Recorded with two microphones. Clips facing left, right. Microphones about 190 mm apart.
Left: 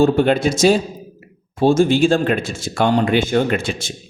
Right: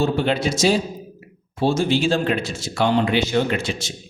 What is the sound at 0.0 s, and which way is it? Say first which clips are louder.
Speech: left 6 dB; 50° left (ahead or behind).